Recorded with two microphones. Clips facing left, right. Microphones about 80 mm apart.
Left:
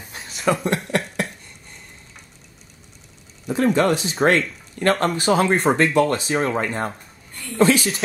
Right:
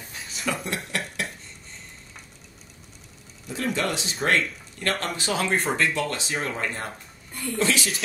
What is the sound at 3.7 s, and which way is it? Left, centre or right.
Speech, left.